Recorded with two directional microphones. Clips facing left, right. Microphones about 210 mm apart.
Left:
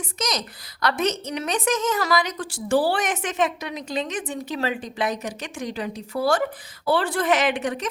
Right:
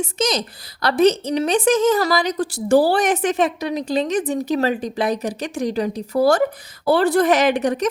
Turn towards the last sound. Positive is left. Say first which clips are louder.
# right 6 dB
turn(degrees=-40)  # may be behind; listen again after turning